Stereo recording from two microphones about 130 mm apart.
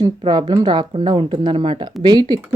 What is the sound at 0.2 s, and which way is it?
Speech, 35° right (ahead or behind).